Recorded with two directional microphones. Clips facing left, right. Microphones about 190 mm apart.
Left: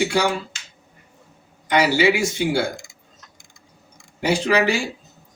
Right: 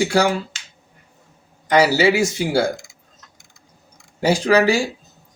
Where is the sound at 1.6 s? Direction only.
40° right (ahead or behind).